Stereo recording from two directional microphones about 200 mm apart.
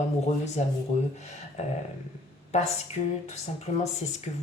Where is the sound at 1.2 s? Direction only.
35° left (ahead or behind).